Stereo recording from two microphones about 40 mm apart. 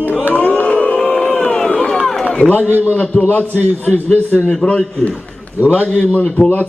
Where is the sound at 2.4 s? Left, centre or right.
Left.